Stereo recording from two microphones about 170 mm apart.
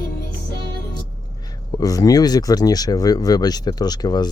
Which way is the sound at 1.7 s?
20° left (ahead or behind).